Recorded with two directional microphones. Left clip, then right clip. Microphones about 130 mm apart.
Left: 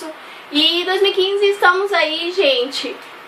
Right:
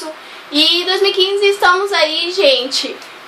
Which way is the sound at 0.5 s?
15° right (ahead or behind).